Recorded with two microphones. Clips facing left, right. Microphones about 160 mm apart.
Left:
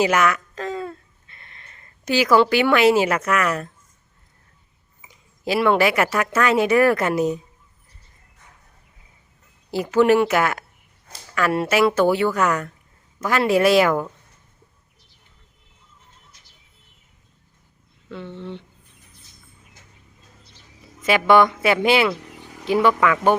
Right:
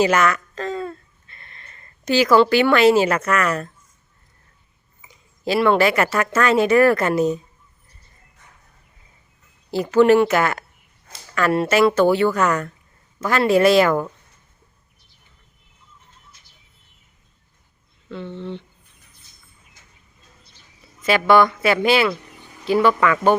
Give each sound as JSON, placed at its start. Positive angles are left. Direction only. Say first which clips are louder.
{"t": 0.0, "sound": "speech", "louder": "right 1 dB", "side_deg": 10}
{"t": 5.0, "sound": "speech", "louder": "right 1 dB", "side_deg": 10}
{"t": 9.7, "sound": "speech", "louder": "right 2 dB", "side_deg": 10}
{"t": 18.1, "sound": "speech", "louder": "right 3 dB", "side_deg": 10}
{"t": 21.1, "sound": "speech", "louder": "even", "side_deg": 15}
{"t": 22.1, "sound": "vehicle", "louder": "left 1 dB", "side_deg": 90}
{"t": 22.6, "sound": "speech", "louder": "right 1 dB", "side_deg": 15}